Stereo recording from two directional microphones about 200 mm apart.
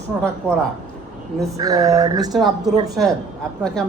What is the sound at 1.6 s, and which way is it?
Speech, 15° right (ahead or behind).